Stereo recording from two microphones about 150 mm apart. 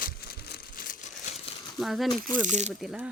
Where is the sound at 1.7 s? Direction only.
Centre (ahead or behind).